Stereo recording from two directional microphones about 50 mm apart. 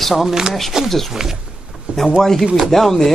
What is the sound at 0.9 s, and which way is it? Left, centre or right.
Speech, centre.